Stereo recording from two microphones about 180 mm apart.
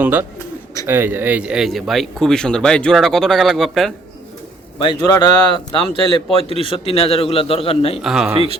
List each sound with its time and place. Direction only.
0.0 s speech: 10° right (ahead or behind)
4.8 s a man's voice: 25° left (ahead or behind)
8.0 s speech: 5° right (ahead or behind)